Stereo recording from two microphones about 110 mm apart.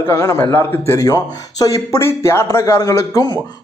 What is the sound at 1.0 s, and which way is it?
A man's voice, 35° left (ahead or behind).